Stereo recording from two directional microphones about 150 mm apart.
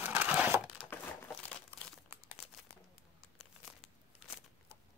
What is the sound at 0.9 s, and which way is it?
Crumpling, 15° left (ahead or behind).